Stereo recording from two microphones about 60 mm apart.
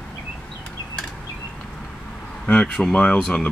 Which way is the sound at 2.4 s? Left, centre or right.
Centre.